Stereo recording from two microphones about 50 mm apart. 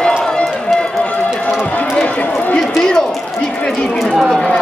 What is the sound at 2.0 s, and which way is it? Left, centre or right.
Speech, left.